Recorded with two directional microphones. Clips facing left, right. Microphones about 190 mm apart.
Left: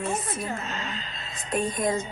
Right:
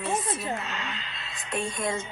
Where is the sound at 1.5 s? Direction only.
40° left (ahead or behind).